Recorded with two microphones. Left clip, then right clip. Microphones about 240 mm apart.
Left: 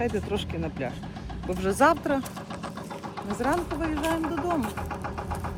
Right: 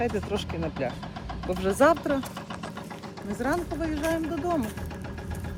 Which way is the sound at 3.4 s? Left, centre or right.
Centre.